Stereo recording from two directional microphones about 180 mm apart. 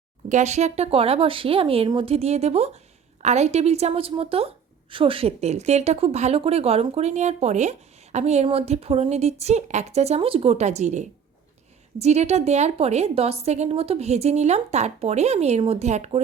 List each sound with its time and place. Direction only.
0.3 s speech: 40° right (ahead or behind)